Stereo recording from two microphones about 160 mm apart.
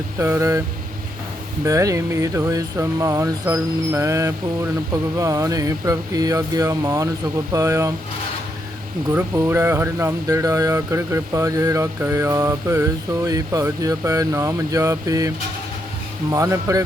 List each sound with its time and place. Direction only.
0.2 s vehicle: 15° right (ahead or behind)
1.6 s speech: 20° right (ahead or behind)
9.1 s speech: 15° right (ahead or behind)
16.3 s speech: 20° right (ahead or behind)